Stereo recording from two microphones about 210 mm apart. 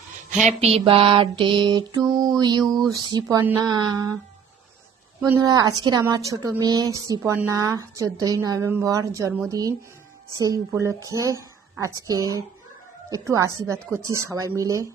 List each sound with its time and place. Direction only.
0.6 s mantra: 25° right (ahead or behind)
2.0 s a woman's voice: 15° right (ahead or behind)
2.4 s mantra: 20° right (ahead or behind)
2.9 s a woman's voice: 20° right (ahead or behind)
3.7 s mantra: 20° right (ahead or behind)
5.2 s a woman's voice: 20° right (ahead or behind)